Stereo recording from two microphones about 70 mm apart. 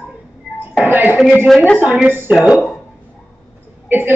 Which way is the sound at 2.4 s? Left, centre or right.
Centre.